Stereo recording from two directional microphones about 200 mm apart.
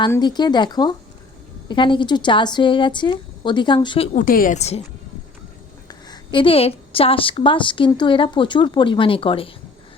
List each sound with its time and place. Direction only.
0.0 s a woman's voice: 20° left (ahead or behind)
5.9 s a woman's voice: 20° left (ahead or behind)